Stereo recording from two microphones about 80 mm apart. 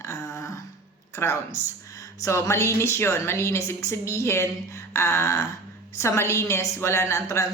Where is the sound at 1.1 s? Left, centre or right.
Left.